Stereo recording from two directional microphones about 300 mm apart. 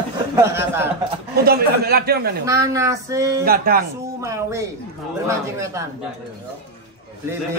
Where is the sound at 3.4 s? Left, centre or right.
Right.